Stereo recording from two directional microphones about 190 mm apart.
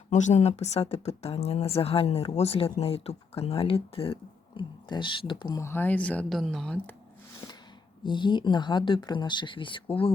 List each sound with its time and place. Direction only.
0.1 s speech: 40° left (ahead or behind); by 6.9 s 5° left (ahead or behind)
7.4 s a sound: 25° left (ahead or behind)
8.0 s speech: 25° left (ahead or behind)